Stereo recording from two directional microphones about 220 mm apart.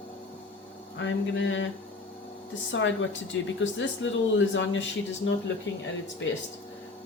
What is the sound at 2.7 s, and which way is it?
A woman's voice, 55° left (ahead or behind).